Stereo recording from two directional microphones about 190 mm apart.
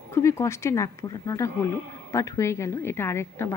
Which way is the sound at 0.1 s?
15° left (ahead or behind).